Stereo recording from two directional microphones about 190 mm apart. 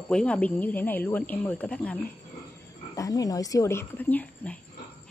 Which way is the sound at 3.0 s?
20° left (ahead or behind).